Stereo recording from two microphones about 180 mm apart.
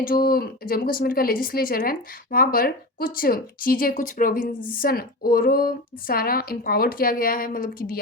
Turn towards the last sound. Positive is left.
turn(degrees=50)  # may be behind; listen again after turning